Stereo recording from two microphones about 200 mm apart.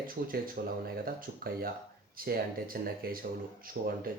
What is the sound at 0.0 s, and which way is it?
Speech, 45° right (ahead or behind).